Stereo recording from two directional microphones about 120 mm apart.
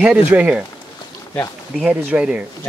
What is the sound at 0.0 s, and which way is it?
Speech, 10° right (ahead or behind).